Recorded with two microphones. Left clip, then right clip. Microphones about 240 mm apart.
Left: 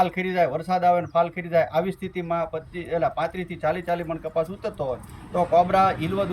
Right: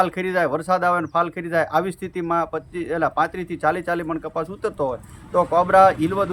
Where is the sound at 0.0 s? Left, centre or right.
Centre.